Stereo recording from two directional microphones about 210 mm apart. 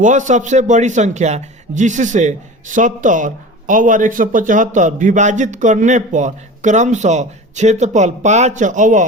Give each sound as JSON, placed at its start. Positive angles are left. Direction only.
{"t": 0.0, "sound": "a man's voice", "side_deg": -35}